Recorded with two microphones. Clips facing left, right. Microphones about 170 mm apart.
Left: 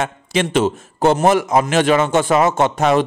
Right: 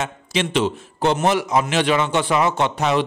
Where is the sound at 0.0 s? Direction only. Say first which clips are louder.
Left 4 dB; 50° left (ahead or behind).